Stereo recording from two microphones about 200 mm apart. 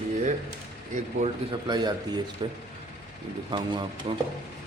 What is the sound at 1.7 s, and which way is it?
Speech, 20° right (ahead or behind).